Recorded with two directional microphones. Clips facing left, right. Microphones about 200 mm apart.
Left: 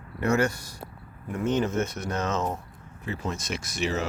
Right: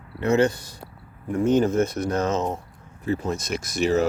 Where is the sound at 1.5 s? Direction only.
35° right (ahead or behind).